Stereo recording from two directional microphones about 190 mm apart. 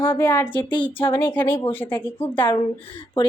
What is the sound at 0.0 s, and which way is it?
A woman's voice, 10° left (ahead or behind).